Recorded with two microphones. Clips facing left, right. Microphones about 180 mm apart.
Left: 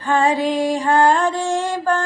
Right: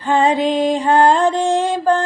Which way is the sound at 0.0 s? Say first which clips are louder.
Right 2 dB; 20° right (ahead or behind).